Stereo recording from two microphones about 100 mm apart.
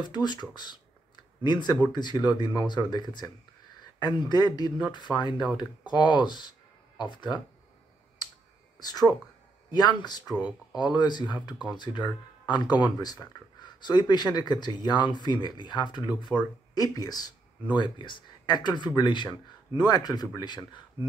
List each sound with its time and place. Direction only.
0.0 s speech: 45° left (ahead or behind)
8.7 s speech: 40° left (ahead or behind)
17.7 s speech: 50° left (ahead or behind)